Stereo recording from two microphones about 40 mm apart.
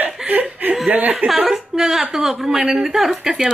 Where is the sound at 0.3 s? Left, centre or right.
Right.